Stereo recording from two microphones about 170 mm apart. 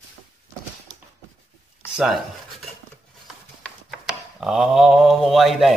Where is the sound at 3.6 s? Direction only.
Centre (ahead or behind).